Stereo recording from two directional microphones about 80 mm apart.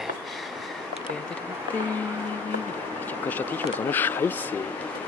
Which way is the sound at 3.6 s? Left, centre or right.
Left.